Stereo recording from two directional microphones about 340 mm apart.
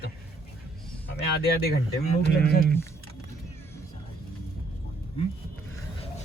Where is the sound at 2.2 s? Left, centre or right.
Left.